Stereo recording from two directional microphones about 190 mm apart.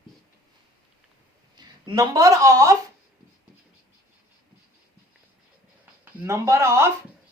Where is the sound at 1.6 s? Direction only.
20° right (ahead or behind).